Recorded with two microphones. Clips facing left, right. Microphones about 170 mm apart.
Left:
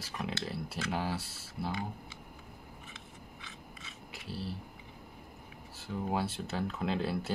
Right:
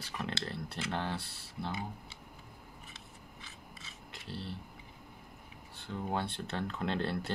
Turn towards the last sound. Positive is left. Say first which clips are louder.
# left 1 dB
turn(degrees=5)  # may be behind; listen again after turning